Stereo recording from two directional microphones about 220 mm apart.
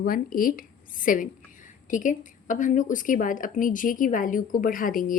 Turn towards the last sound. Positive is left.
turn(degrees=40)  # may be behind; listen again after turning